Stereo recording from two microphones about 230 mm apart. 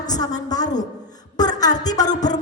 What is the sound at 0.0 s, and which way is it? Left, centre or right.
Speech, centre.